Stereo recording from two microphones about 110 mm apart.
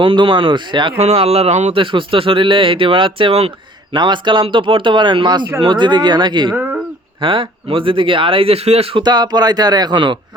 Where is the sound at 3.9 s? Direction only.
45° right (ahead or behind); by 9.0 s 60° right (ahead or behind).